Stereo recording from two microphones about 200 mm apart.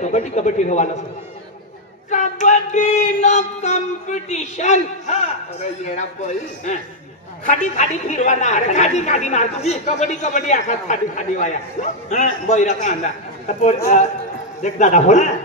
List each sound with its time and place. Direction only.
0.0 s a woman's voice: 35° left (ahead or behind)
2.0 s a woman's voice: 35° left (ahead or behind)
13.9 s a woman's voice: 40° left (ahead or behind)